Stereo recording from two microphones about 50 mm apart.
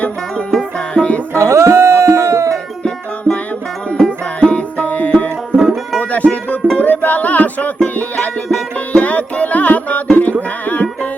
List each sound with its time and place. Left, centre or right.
0.9 s music: left
1.3 s music: right
3.3 s music: right
3.9 s music: centre
5.5 s music: centre
6.0 s music: left